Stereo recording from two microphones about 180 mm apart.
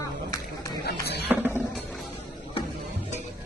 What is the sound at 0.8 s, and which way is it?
Run, 65° left (ahead or behind).